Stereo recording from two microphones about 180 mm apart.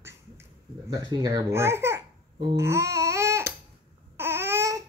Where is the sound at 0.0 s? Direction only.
15° right (ahead or behind).